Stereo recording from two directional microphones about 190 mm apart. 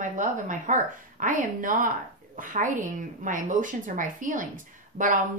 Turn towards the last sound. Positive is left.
turn(degrees=-40)  # may be behind; listen again after turning